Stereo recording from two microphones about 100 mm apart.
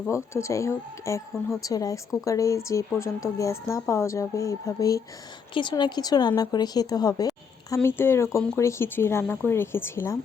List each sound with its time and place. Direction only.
0.3 s a woman's voice: 30° left (ahead or behind)
5.5 s speech: 50° left (ahead or behind)
7.9 s a woman's voice: 25° left (ahead or behind)